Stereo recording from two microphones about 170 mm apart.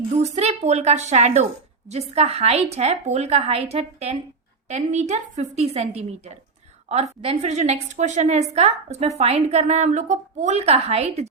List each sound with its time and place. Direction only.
0.1 s a woman's voice: 40° right (ahead or behind)